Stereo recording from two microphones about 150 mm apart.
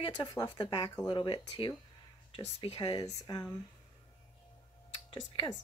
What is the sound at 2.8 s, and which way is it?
Speech, 25° left (ahead or behind).